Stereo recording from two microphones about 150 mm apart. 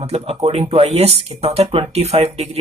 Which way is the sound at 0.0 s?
45° right (ahead or behind).